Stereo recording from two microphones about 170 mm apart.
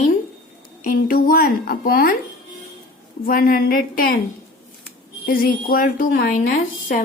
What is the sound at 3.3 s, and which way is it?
Speech, 60° left (ahead or behind).